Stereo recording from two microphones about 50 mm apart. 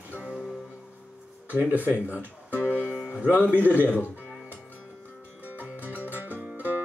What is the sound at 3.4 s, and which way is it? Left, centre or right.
Speech, left.